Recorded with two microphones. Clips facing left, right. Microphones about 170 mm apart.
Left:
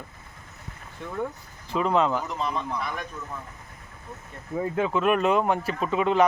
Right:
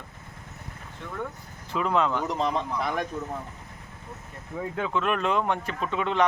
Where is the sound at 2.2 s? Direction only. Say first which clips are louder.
Right 3 dB; 75° right (ahead or behind).